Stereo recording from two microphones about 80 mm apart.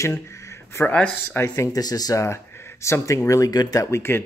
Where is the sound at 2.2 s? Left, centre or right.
Left.